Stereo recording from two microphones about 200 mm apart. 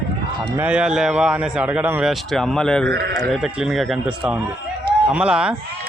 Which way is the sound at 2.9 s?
55° right (ahead or behind).